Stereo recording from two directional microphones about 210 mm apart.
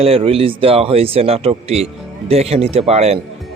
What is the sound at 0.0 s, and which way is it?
A man's voice, 25° right (ahead or behind).